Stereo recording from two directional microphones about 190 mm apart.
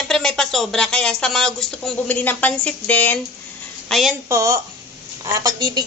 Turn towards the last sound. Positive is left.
turn(degrees=-20)  # may be behind; listen again after turning